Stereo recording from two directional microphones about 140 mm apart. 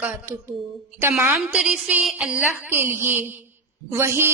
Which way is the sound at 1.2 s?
10° right (ahead or behind).